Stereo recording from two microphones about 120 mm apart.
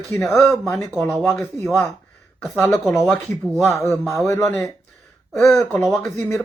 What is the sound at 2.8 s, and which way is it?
Speech, 5° right (ahead or behind).